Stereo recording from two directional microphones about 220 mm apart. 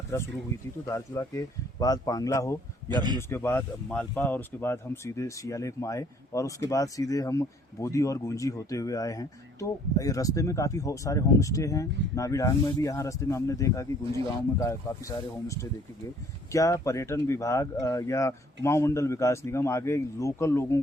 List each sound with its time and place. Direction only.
0.1 s speech: 10° left (ahead or behind)
2.9 s speech: 20° right (ahead or behind)
3.2 s speech: 10° left (ahead or behind)